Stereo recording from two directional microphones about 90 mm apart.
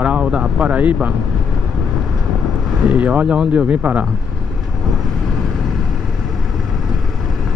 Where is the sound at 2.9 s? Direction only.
15° right (ahead or behind).